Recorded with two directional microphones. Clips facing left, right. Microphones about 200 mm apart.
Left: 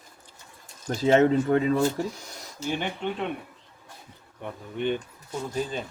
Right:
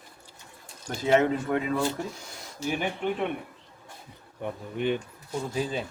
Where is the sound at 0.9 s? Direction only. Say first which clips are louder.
Left 3 dB; 40° left (ahead or behind).